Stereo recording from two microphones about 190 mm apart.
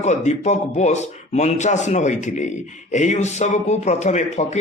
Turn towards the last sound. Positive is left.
turn(degrees=35)  # may be behind; listen again after turning